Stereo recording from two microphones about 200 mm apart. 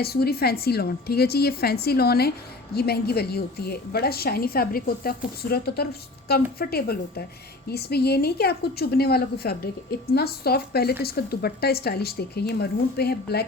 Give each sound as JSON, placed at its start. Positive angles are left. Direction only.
{"t": 0.0, "sound": "a woman's voice", "side_deg": 50}